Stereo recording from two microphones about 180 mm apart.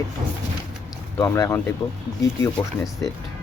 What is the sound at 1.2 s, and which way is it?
Speech, 15° left (ahead or behind).